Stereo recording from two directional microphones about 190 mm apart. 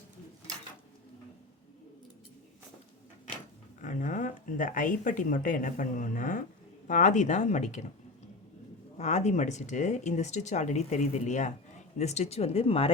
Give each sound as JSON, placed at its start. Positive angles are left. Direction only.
{"t": 3.8, "sound": "speech", "side_deg": 40}
{"t": 9.0, "sound": "speech", "side_deg": 40}